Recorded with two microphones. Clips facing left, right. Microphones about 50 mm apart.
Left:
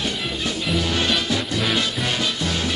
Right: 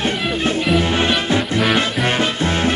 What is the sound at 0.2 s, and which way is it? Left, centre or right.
Music, right.